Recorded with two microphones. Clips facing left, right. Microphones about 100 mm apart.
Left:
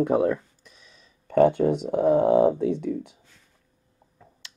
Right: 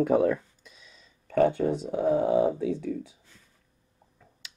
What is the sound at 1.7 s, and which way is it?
Speech, 60° left (ahead or behind).